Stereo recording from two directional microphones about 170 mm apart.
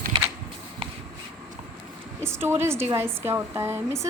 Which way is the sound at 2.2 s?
15° right (ahead or behind).